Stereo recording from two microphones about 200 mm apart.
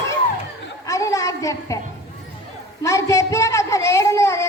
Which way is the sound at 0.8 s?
15° left (ahead or behind).